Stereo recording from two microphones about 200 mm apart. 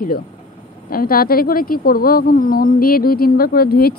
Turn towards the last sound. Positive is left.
turn(degrees=50)  # may be behind; listen again after turning